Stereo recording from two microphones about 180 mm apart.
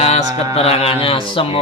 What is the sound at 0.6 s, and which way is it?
Speech, 35° left (ahead or behind).